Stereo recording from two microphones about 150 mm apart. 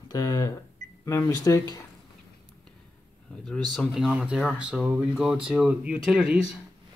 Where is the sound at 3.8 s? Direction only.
Centre (ahead or behind).